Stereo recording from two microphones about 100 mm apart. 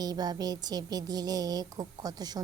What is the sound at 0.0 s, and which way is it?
A woman's voice, 40° right (ahead or behind).